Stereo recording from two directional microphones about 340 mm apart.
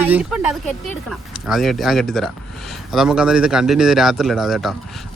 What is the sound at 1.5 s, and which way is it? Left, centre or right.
A man's voice, centre.